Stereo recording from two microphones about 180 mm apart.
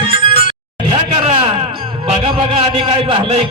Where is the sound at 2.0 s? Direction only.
35° right (ahead or behind).